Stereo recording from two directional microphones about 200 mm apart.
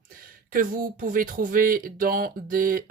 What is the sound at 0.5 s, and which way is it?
Speech, 45° right (ahead or behind).